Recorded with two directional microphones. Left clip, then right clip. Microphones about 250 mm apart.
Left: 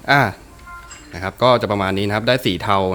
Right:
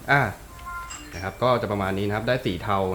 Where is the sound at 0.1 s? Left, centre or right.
Left.